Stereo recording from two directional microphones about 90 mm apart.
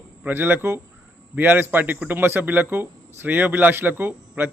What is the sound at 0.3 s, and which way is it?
Speech, 25° right (ahead or behind).